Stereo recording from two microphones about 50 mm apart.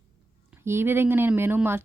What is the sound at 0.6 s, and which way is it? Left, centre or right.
Speech, right.